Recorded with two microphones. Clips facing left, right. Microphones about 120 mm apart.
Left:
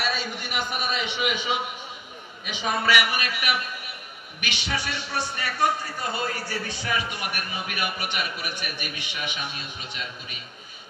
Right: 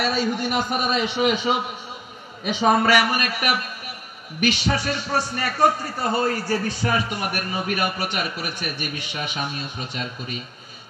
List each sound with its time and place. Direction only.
0.0 s a man's voice: 40° right (ahead or behind)